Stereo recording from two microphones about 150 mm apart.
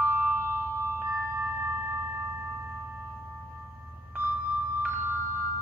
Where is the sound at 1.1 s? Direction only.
10° right (ahead or behind).